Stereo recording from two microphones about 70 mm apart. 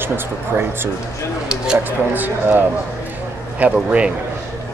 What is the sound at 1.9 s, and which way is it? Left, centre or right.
Speech, right.